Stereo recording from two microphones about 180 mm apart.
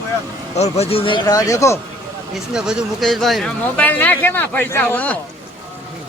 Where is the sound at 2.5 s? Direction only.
Centre (ahead or behind).